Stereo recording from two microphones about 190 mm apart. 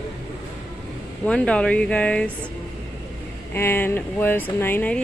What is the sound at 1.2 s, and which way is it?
Speech, 5° left (ahead or behind).